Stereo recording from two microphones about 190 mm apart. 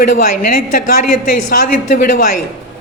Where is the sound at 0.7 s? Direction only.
50° left (ahead or behind).